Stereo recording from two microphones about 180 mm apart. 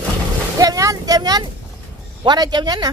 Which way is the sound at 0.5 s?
20° right (ahead or behind).